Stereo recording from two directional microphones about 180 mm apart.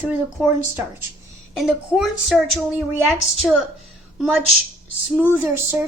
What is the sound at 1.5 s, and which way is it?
A woman's voice, 5° right (ahead or behind).